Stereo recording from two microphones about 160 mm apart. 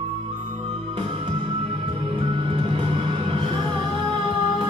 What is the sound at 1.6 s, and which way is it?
Music, 30° right (ahead or behind).